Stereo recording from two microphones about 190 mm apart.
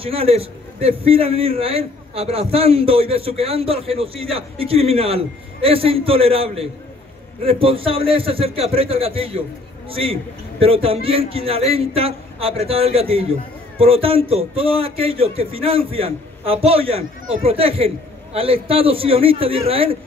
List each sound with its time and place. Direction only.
0.0 s a man's voice: 30° right (ahead or behind)